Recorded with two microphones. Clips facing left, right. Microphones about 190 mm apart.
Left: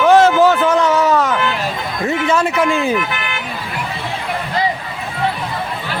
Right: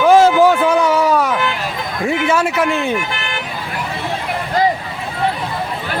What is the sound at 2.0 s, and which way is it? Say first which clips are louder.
Speech: even; 10° right (ahead or behind).